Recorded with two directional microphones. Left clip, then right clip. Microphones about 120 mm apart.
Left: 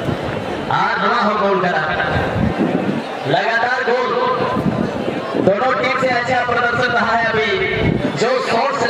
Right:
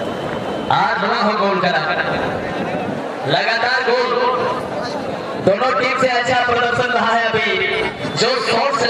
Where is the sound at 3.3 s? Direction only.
30° right (ahead or behind).